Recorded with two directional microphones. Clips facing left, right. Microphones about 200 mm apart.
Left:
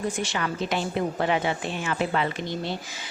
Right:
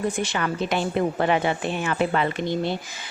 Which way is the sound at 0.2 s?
55° right (ahead or behind).